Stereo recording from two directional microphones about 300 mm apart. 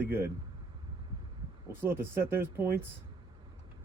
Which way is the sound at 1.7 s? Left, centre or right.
Centre.